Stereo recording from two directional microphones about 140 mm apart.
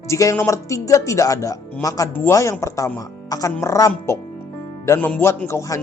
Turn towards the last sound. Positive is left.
turn(degrees=20)  # may be behind; listen again after turning